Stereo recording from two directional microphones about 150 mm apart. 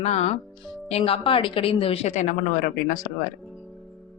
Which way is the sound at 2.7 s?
70° left (ahead or behind).